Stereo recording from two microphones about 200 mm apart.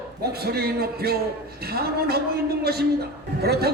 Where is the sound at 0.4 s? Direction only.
50° right (ahead or behind).